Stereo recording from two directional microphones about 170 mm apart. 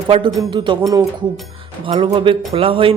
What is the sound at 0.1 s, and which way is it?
Speech, 25° right (ahead or behind).